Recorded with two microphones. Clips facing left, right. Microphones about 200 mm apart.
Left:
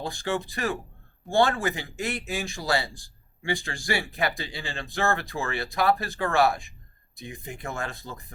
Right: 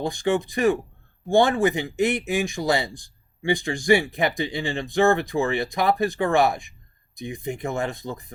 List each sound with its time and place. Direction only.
0.0 s speech: 15° right (ahead or behind)